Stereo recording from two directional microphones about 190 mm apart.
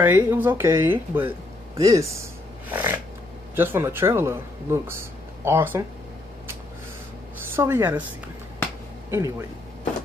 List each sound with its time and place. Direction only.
0.0 s speech: 10° right (ahead or behind)
7.4 s speech: 10° right (ahead or behind)
9.1 s speech: 15° right (ahead or behind)